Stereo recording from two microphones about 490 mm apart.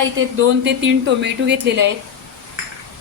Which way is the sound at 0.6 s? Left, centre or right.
Right.